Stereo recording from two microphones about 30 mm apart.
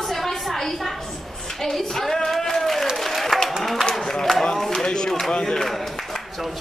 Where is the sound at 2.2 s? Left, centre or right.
Centre.